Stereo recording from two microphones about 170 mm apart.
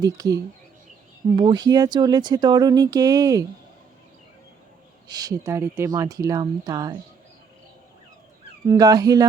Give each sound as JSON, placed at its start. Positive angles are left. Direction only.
{"t": 0.0, "sound": "speech", "side_deg": -20}
{"t": 1.4, "sound": "speech", "side_deg": -25}
{"t": 5.0, "sound": "speech", "side_deg": -20}
{"t": 8.6, "sound": "speech", "side_deg": -20}